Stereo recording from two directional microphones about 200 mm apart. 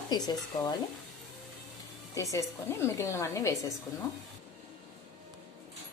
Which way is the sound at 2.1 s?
15° left (ahead or behind).